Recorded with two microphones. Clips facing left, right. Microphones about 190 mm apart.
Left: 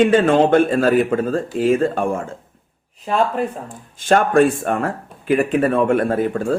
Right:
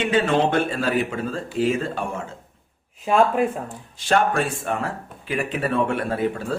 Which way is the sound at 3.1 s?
5° right (ahead or behind).